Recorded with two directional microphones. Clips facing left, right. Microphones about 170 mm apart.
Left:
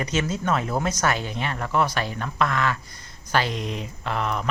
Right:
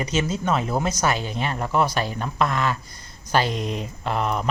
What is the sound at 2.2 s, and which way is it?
Speech, 35° right (ahead or behind).